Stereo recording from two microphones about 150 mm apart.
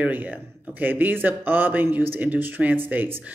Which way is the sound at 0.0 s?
10° right (ahead or behind).